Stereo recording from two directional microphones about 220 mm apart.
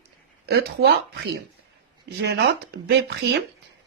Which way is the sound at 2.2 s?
50° right (ahead or behind).